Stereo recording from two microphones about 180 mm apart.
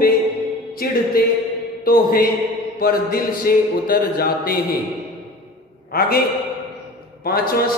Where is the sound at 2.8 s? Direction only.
55° left (ahead or behind).